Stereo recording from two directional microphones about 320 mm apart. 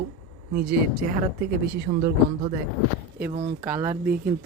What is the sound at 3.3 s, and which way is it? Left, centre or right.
Speech, right.